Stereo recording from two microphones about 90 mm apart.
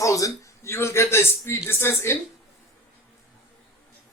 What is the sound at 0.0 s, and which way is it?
Speech, 35° left (ahead or behind).